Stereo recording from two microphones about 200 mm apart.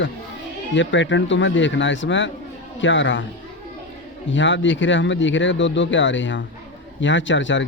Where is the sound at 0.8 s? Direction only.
65° left (ahead or behind).